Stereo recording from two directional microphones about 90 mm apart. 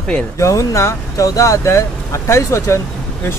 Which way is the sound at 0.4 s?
35° left (ahead or behind).